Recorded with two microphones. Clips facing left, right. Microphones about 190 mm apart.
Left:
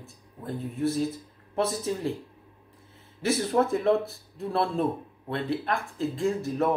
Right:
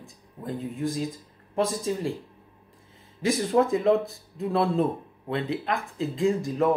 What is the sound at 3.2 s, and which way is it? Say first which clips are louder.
Speech: right 2 dB; 15° right (ahead or behind).